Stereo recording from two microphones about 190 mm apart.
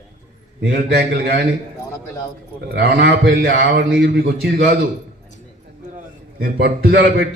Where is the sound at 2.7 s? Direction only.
60° right (ahead or behind).